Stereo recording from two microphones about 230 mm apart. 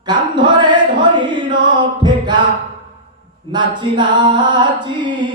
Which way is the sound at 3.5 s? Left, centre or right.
Centre.